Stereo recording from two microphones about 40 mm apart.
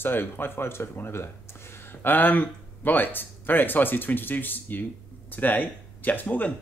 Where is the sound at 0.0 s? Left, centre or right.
Left.